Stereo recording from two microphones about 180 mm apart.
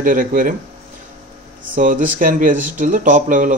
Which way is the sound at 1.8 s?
50° right (ahead or behind).